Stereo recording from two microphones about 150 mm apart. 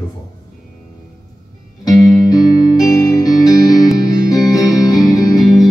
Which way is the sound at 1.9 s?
25° left (ahead or behind).